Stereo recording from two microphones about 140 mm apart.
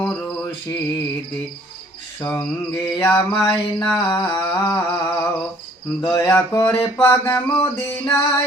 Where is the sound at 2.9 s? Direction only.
20° left (ahead or behind).